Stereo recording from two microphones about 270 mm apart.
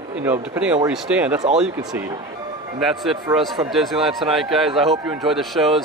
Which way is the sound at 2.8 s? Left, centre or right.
Centre.